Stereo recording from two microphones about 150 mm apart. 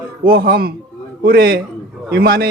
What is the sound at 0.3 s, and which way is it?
A man's voice, 90° right.